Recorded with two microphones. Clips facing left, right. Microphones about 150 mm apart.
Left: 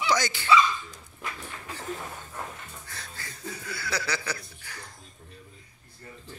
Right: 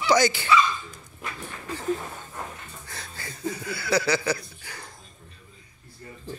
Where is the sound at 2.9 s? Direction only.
20° right (ahead or behind).